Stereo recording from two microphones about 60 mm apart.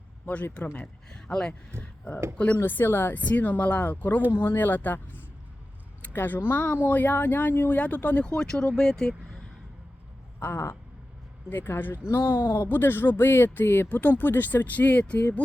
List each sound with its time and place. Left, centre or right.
0.6 s speech: left
1.3 s speech: centre
1.8 s speech: left
3.2 s speech: left
8.2 s speech: centre
10.4 s speech: left